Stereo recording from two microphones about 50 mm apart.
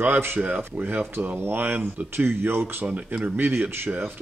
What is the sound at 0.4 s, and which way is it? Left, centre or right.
Speech, right.